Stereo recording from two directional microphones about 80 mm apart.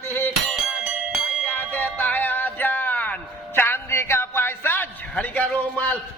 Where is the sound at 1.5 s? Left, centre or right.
Left.